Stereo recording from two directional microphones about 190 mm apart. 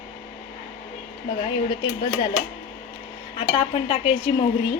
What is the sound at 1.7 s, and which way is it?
Speech, 20° left (ahead or behind).